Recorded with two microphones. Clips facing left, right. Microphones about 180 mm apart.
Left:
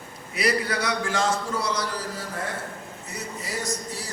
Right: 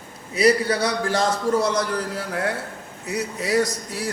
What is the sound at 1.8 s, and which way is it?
A man's voice, 60° right (ahead or behind).